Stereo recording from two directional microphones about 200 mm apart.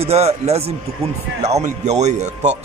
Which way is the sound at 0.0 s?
30° right (ahead or behind).